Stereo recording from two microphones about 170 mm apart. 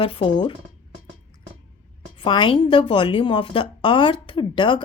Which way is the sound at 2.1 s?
30° left (ahead or behind).